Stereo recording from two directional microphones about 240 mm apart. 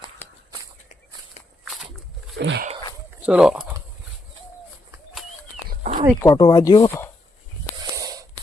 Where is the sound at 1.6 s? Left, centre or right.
Centre.